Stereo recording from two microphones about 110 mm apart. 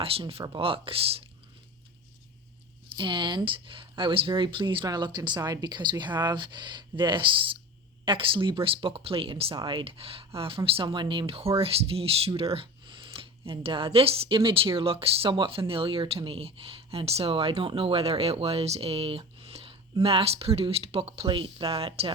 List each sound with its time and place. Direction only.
0.0 s speech: 55° right (ahead or behind)
3.0 s speech: 45° right (ahead or behind); by 21.2 s 65° right (ahead or behind)
21.2 s speech: 50° right (ahead or behind)